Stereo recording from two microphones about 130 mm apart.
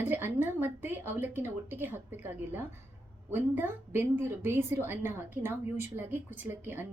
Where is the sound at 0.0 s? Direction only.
15° right (ahead or behind).